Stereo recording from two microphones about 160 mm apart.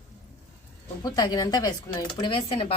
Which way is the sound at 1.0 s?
25° left (ahead or behind).